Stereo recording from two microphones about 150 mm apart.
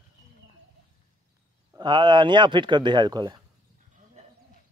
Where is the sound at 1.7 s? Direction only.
30° right (ahead or behind).